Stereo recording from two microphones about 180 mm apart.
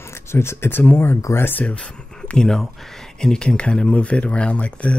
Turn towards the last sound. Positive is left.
turn(degrees=5)  # may be behind; listen again after turning